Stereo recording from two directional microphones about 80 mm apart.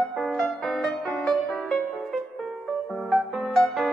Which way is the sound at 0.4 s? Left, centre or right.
Centre.